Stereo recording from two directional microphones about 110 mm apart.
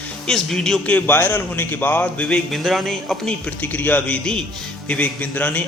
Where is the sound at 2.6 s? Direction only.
Centre (ahead or behind).